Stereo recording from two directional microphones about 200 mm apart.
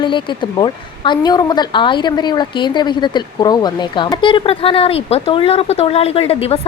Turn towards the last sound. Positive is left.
turn(degrees=30)  # may be behind; listen again after turning